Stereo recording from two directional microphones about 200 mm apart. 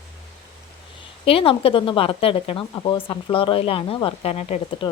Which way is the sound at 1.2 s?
30° left (ahead or behind).